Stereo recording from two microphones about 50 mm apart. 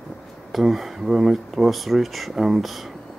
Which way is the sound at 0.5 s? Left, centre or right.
Centre.